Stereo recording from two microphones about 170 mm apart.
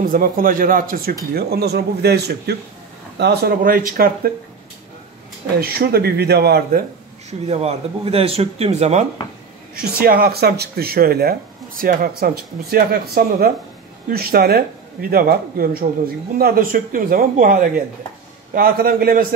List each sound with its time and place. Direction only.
0.0 s speech: 55° right (ahead or behind)
1.3 s speech: 65° right (ahead or behind)
5.6 s speech: 65° right (ahead or behind)
7.2 s speech: 40° right (ahead or behind)
9.9 s speech: 60° right (ahead or behind)